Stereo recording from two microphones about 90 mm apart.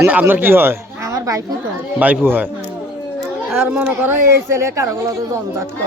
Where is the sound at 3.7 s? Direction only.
15° right (ahead or behind).